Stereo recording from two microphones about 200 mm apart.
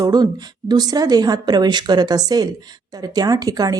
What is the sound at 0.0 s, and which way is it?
A woman's voice, 20° right (ahead or behind).